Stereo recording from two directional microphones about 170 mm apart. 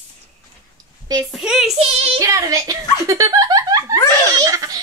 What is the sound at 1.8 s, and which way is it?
Speech, 35° right (ahead or behind).